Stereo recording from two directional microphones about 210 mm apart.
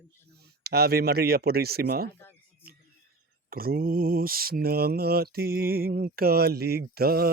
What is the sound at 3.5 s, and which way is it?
Mantra, 45° right (ahead or behind).